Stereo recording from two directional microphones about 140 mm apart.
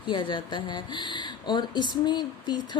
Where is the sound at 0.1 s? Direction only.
35° left (ahead or behind).